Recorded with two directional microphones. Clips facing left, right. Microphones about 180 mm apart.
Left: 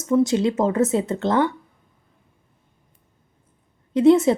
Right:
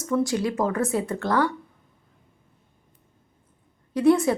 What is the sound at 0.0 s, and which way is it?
A woman's voice, 20° left (ahead or behind).